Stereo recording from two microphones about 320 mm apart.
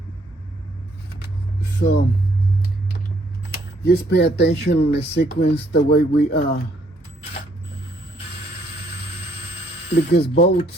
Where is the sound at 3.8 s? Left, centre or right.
Left.